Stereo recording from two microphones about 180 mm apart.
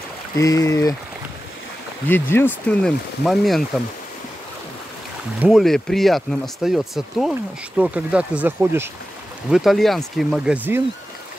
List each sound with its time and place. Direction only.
0.4 s speech: 20° left (ahead or behind)
2.0 s speech: 10° left (ahead or behind)
5.4 s speech: centre (ahead or behind)
9.5 s speech: centre (ahead or behind)